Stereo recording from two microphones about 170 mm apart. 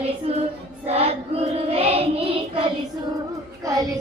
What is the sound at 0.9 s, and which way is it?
Child singing, 35° right (ahead or behind).